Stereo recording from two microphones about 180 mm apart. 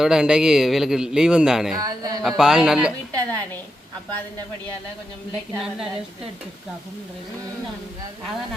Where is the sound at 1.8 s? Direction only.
20° right (ahead or behind).